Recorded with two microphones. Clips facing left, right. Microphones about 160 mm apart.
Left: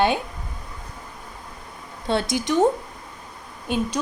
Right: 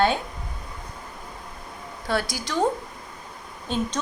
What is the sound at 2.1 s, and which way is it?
Speech, 25° left (ahead or behind).